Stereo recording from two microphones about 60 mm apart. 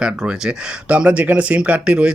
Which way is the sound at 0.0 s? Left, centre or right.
Centre.